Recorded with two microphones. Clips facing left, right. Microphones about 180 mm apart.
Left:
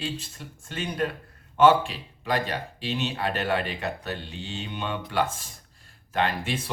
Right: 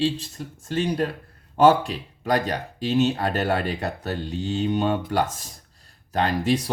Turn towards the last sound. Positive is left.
turn(degrees=-40)  # may be behind; listen again after turning